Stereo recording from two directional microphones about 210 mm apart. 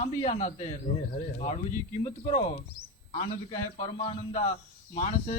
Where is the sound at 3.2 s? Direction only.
20° left (ahead or behind).